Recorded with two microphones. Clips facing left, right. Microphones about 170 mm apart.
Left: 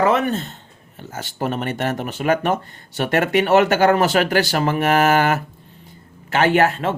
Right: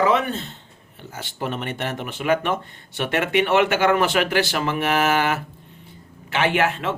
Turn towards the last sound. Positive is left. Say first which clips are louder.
# left 4 dB
turn(degrees=40)  # may be behind; listen again after turning